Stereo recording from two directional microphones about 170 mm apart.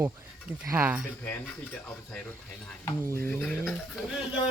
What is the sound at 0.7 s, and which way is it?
Speech, 10° right (ahead or behind).